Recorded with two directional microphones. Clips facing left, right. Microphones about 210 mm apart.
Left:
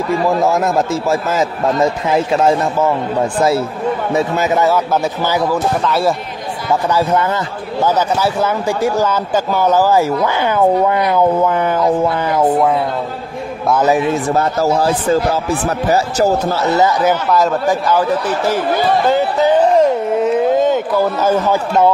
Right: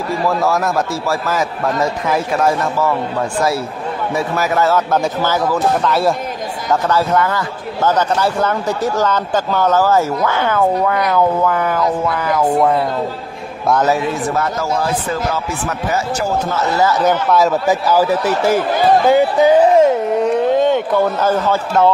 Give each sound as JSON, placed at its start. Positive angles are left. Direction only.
{"t": 0.4, "sound": "a man's voice", "side_deg": 20}
{"t": 5.9, "sound": "speech", "side_deg": 0}
{"t": 6.7, "sound": "speech", "side_deg": 10}
{"t": 7.8, "sound": "speech", "side_deg": 10}
{"t": 14.3, "sound": "speech", "side_deg": 30}
{"t": 17.0, "sound": "a man's voice", "side_deg": 0}